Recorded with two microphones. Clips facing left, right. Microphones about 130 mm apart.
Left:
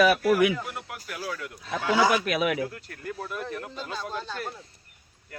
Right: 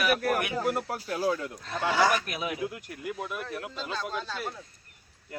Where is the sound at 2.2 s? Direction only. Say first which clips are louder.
Left 8 dB; 80° left.